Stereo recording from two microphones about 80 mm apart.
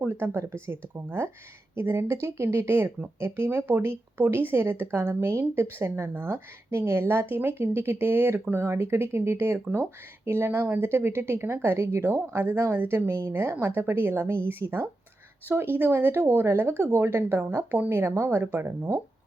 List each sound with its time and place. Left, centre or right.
0.0 s speech: right